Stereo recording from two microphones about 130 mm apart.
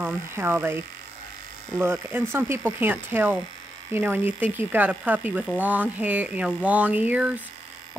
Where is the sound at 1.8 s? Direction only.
15° right (ahead or behind).